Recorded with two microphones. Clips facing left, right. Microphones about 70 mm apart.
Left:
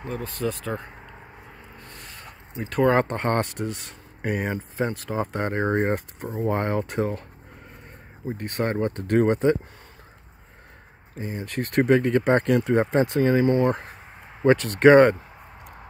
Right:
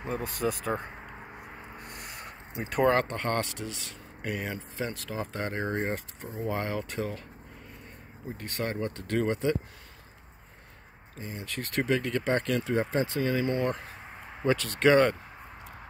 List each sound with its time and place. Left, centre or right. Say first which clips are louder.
0.0 s speech: left 2 dB; centre
1.8 s a sound: even; centre
3.1 s speech: left 6 dB; left
4.2 s speech: left 7 dB; left
8.4 s speech: left 7 dB; left
11.1 s speech: left 8 dB; left
12.7 s speech: left 5 dB; left